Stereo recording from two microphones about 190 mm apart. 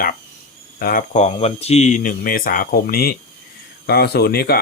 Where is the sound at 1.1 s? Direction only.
35° left (ahead or behind).